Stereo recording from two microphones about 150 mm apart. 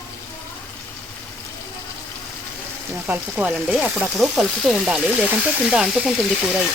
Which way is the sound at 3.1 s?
10° right (ahead or behind).